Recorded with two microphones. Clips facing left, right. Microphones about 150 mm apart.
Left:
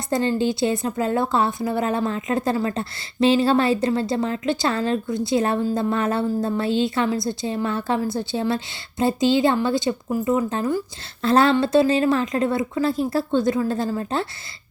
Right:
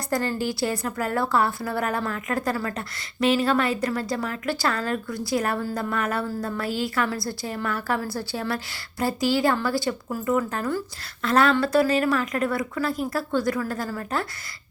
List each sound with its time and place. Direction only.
0.1 s a woman's voice: 20° left (ahead or behind)
11.2 s a woman's voice: 30° left (ahead or behind)